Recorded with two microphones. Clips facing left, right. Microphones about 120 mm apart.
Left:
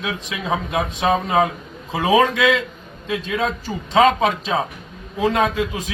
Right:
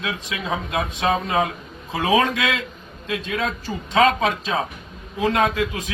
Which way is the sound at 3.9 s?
20° left (ahead or behind).